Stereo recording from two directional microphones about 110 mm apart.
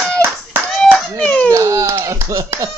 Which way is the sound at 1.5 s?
30° right (ahead or behind).